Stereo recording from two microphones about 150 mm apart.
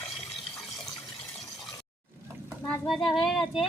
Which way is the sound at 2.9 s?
Centre (ahead or behind).